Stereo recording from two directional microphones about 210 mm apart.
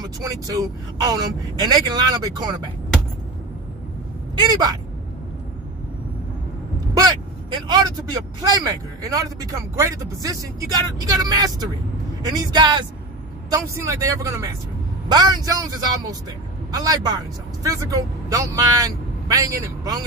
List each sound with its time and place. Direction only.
0.0 s a man's voice: 20° right (ahead or behind)
4.5 s speech: 20° right (ahead or behind)
6.9 s vehicle: 20° right (ahead or behind)
8.4 s a man's voice: 20° right (ahead or behind)